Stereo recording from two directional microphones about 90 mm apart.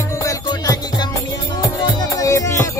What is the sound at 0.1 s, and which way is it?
Music, 35° left (ahead or behind).